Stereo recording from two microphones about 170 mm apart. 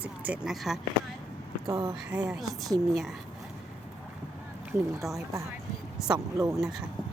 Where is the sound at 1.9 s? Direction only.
5° right (ahead or behind).